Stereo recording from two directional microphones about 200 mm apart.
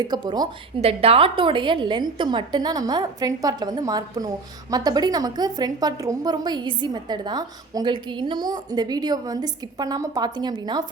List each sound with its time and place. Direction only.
0.0 s a woman's voice: 20° right (ahead or behind)